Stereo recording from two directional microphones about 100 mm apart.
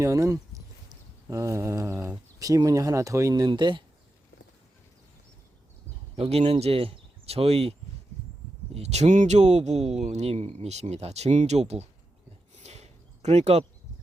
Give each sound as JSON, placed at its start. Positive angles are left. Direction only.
{"t": 0.0, "sound": "speech", "side_deg": -30}
{"t": 6.1, "sound": "speech", "side_deg": -80}
{"t": 12.6, "sound": "a sound", "side_deg": -90}
{"t": 13.3, "sound": "speech", "side_deg": -90}